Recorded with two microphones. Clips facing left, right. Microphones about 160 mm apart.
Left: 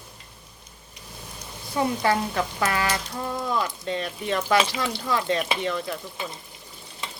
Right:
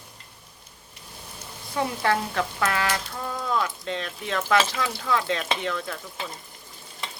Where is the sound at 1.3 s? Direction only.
5° left (ahead or behind).